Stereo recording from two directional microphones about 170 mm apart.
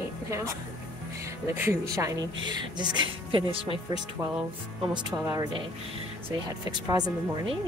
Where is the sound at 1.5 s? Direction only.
15° right (ahead or behind).